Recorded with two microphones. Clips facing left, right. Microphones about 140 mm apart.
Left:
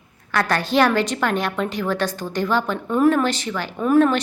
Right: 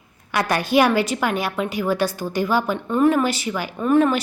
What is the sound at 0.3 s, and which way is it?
A woman's voice, 15° right (ahead or behind).